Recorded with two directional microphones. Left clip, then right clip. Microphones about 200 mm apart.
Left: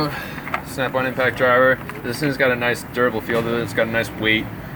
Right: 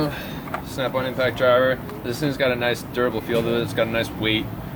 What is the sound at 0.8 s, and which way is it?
Speech, 25° left (ahead or behind).